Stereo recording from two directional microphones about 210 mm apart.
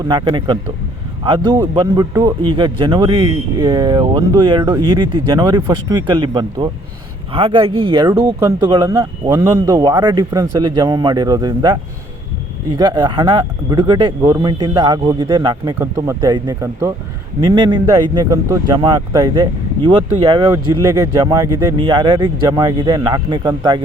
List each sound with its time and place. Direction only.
0.1 s speech: 20° right (ahead or behind)